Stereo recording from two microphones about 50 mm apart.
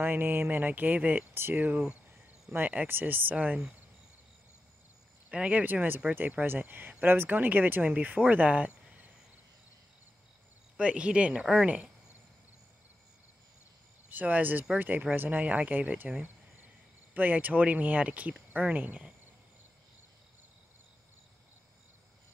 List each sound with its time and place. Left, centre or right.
0.0 s speech: right
2.5 s speech: right
5.3 s speech: right
10.8 s speech: right
14.0 s speech: right
16.0 s speech: right